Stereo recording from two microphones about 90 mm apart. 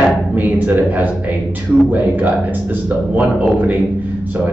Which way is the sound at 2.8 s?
20° right (ahead or behind).